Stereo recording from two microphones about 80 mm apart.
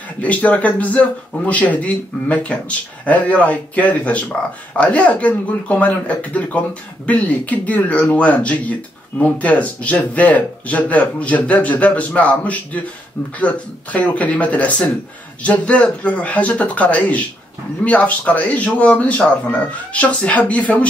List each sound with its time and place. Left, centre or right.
0.2 s speech: centre